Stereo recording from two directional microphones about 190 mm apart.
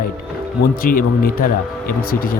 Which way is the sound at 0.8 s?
50° left (ahead or behind).